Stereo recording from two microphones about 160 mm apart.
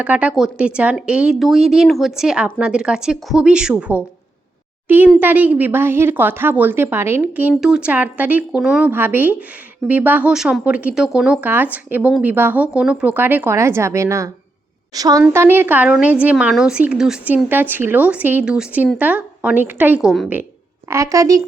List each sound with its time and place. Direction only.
0.0 s a woman's voice: 10° right (ahead or behind)
20.9 s a woman's voice: 20° right (ahead or behind)